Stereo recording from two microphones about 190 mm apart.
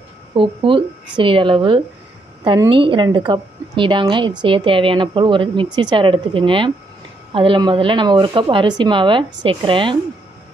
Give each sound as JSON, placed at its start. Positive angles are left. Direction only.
{"t": 0.3, "sound": "a woman's voice", "side_deg": -25}